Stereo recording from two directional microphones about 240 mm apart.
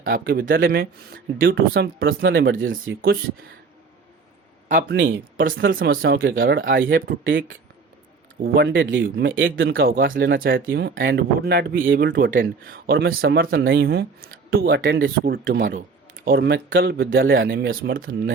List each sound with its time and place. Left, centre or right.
0.0 s speech: right
1.4 s speech: right
4.8 s speech: right
6.3 s speech: right
7.3 s speech: right
9.7 s speech: right
10.7 s speech: right
15.2 s speech: right
17.1 s speech: right
17.3 s speech: right